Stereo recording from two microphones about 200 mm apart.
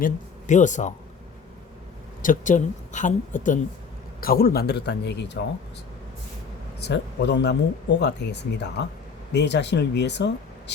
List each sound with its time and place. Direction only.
0.0 s speech: 35° left (ahead or behind)
2.2 s speech: 40° left (ahead or behind); by 5.4 s 60° left (ahead or behind)
6.7 s speech: 60° left (ahead or behind)